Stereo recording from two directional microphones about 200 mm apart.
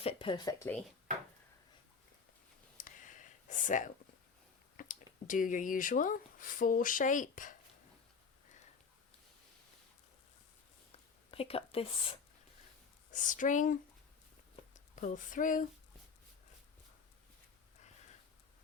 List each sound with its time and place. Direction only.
0.0 s speech: 30° left (ahead or behind)
2.7 s a sound: 40° left (ahead or behind)
4.8 s speech: 40° left (ahead or behind)
10.9 s a sound: 30° left (ahead or behind)
13.1 s speech: 40° left (ahead or behind)
14.9 s speech: 40° left (ahead or behind)